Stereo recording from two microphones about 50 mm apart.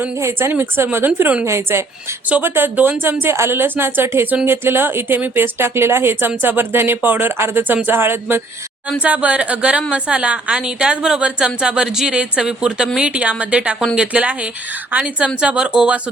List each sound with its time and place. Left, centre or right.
0.9 s speech: right
1.5 s a woman's voice: right
3.0 s speech: right
9.0 s a woman's voice: right
13.0 s a woman's voice: right